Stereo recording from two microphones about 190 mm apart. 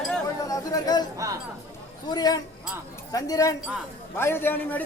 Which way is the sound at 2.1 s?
20° left (ahead or behind).